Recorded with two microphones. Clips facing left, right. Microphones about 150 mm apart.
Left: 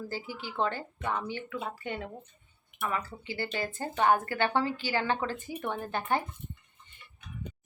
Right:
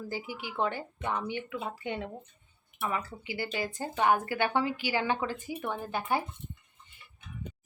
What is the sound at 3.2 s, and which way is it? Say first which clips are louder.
A woman's voice: even; 10° right (ahead or behind).